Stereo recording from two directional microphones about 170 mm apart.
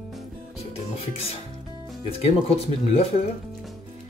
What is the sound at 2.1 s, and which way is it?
Speech, 35° left (ahead or behind).